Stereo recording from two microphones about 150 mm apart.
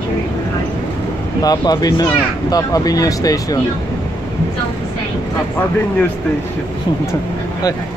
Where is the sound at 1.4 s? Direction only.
25° left (ahead or behind).